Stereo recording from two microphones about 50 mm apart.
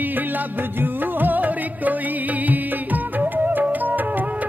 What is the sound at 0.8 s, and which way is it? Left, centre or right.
Music, right.